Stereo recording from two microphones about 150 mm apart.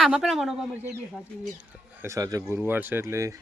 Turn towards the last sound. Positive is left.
turn(degrees=-20)  # may be behind; listen again after turning